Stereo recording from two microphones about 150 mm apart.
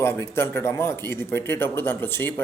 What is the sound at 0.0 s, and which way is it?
Speech, 15° left (ahead or behind).